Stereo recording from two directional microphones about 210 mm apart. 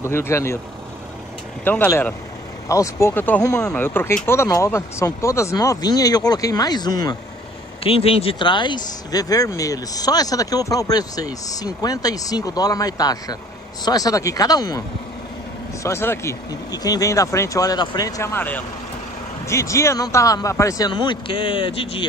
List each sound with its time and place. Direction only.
0.0 s speech: 10° left (ahead or behind)
1.6 s speech: 10° left (ahead or behind)
15.8 s speech: 10° left (ahead or behind)